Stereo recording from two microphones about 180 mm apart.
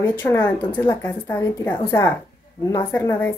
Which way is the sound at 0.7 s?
25° left (ahead or behind).